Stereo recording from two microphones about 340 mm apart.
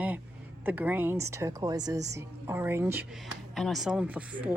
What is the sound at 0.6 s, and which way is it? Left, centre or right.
A woman's voice, centre.